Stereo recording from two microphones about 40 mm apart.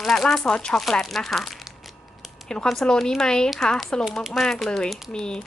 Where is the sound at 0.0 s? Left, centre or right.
Centre.